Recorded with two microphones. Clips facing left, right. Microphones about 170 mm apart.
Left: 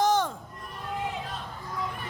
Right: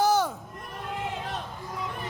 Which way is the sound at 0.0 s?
5° right (ahead or behind).